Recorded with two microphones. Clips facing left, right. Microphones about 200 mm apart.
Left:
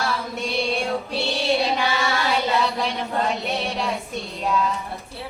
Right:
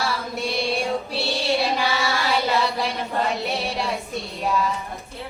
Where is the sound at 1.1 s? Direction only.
Centre (ahead or behind).